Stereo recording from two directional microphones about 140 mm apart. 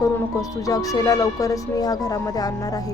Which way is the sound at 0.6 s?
25° left (ahead or behind).